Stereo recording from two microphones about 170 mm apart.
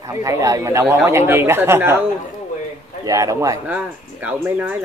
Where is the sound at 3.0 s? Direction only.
20° right (ahead or behind).